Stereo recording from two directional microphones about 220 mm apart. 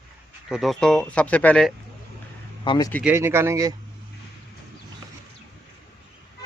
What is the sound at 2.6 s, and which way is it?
Speech, 20° left (ahead or behind).